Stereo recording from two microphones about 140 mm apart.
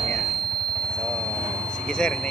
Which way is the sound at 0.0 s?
Centre (ahead or behind).